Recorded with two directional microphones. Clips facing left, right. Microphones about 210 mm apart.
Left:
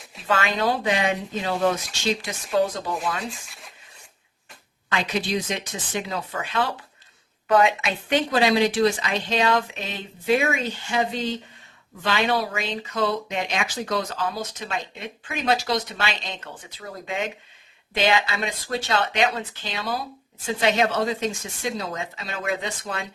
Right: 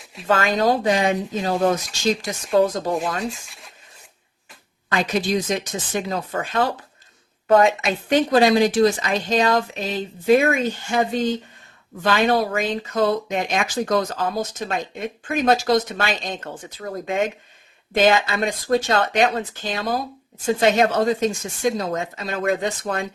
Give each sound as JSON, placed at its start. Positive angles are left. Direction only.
{"t": 0.0, "sound": "a sound", "side_deg": 0}
{"t": 0.3, "sound": "speech", "side_deg": -40}
{"t": 3.2, "sound": "speech", "side_deg": 0}
{"t": 4.9, "sound": "speech", "side_deg": -45}